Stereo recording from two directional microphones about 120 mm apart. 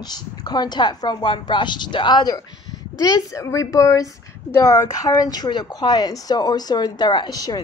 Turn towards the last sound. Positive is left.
turn(degrees=35)  # may be behind; listen again after turning